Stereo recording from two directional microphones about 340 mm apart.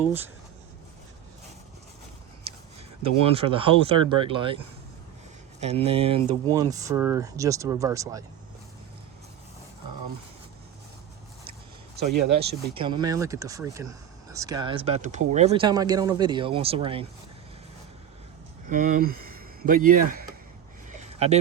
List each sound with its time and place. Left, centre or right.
0.0 s speech: centre
3.2 s speech: centre
12.1 s speech: right
12.7 s speech: centre
18.7 s speech: right
21.1 s a sound: centre